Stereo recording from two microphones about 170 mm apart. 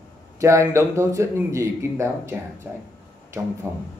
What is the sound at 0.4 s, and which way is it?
Speech, 15° right (ahead or behind).